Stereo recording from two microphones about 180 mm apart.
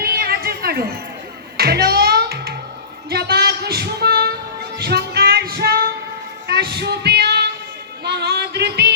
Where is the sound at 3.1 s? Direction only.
60° right (ahead or behind).